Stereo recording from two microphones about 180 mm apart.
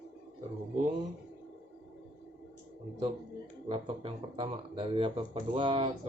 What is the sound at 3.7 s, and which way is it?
Speech, 30° right (ahead or behind).